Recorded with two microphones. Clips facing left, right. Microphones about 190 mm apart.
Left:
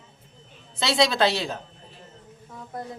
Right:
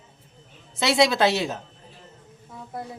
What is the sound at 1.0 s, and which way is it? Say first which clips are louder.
Speech: right 1 dB; 20° right (ahead or behind).